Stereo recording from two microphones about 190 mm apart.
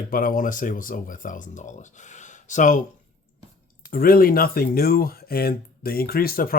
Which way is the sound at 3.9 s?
50° left (ahead or behind).